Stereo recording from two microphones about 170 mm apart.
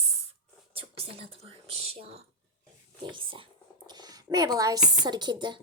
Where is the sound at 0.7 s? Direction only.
35° right (ahead or behind).